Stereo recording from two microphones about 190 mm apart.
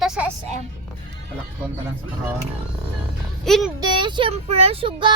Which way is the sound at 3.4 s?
Centre (ahead or behind).